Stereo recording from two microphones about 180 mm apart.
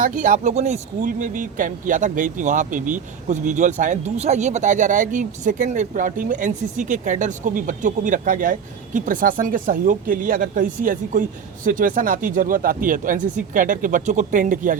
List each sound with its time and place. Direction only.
0.0 s speech: 45° right (ahead or behind)